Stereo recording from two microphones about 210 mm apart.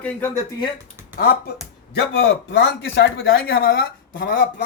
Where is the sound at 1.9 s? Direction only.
55° left (ahead or behind).